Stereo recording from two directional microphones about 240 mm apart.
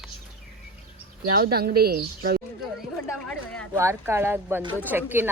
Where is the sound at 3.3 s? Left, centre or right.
Centre.